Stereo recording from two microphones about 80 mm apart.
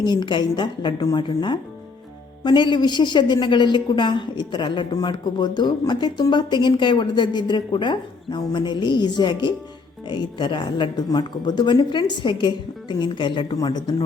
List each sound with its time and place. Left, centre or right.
0.0 s speech: left
0.9 s speech: left
2.4 s speech: left
3.4 s a woman's voice: left
5.0 s speech: left
13.6 s speech: left